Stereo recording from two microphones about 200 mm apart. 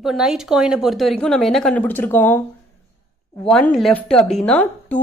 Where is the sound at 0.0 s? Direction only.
Centre (ahead or behind).